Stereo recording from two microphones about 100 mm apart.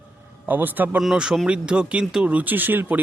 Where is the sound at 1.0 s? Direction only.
5° right (ahead or behind).